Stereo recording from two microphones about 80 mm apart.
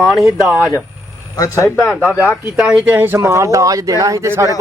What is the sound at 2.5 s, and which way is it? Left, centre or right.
Speech, centre.